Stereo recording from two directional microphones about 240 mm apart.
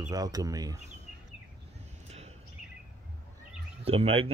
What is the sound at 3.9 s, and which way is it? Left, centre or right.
Speech, right.